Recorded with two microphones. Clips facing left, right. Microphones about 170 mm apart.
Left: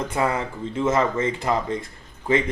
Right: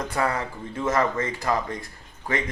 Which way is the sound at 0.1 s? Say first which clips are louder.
Left 2 dB; 20° left (ahead or behind).